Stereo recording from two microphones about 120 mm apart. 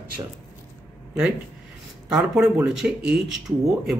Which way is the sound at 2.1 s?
5° right (ahead or behind).